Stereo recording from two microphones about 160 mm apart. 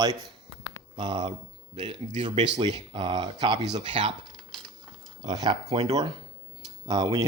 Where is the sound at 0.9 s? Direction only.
30° right (ahead or behind).